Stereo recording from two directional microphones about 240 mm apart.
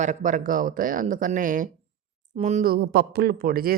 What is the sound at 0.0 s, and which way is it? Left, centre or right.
Speech, right.